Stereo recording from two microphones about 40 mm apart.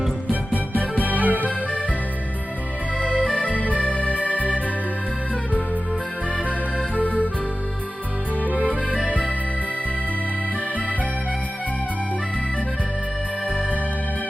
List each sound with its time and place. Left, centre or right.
0.3 s music: right
1.0 s music: right
1.4 s music: left
3.2 s music: right
3.5 s music: left
3.8 s organ: left
4.3 s music: left
6.7 s music: left
9.0 s music: left